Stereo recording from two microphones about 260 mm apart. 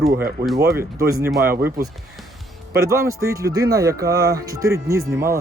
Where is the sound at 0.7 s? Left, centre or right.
Centre.